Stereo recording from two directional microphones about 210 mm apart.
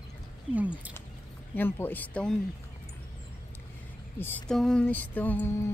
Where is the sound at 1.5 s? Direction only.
10° left (ahead or behind).